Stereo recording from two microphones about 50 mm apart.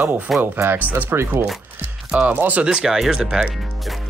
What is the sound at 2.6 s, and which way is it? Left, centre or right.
Speech, centre.